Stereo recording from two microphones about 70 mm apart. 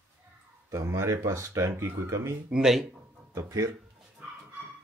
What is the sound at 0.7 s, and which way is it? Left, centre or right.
Speech, right.